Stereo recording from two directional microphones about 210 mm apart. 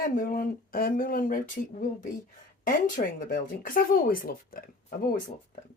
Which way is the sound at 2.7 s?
40° left (ahead or behind).